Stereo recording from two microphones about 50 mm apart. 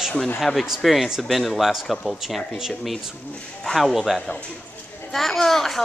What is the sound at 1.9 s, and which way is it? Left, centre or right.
Speech, centre.